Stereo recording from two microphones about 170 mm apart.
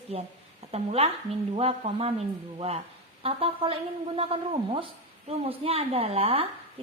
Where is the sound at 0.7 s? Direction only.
35° right (ahead or behind).